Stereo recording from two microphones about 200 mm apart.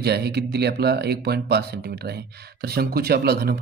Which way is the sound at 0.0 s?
55° right (ahead or behind).